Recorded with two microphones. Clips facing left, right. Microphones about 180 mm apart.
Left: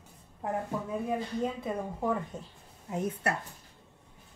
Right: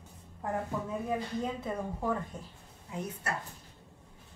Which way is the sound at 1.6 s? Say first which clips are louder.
Left 2 dB; 15° left (ahead or behind).